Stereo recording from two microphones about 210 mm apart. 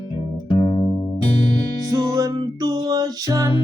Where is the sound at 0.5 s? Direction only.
20° left (ahead or behind).